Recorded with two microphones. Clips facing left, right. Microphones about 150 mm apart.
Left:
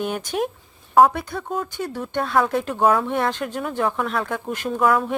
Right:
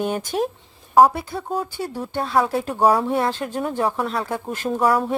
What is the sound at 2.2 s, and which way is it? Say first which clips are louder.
Speech: even; 5° right (ahead or behind).